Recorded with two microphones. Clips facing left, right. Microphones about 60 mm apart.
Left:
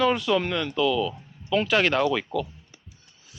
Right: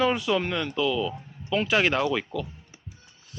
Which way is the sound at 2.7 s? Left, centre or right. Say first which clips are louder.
Right 3 dB; centre.